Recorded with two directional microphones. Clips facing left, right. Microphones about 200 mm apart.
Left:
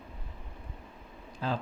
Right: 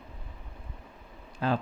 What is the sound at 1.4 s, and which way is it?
Speech, 60° right (ahead or behind).